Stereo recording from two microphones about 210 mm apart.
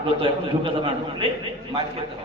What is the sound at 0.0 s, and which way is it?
Speech, 25° right (ahead or behind).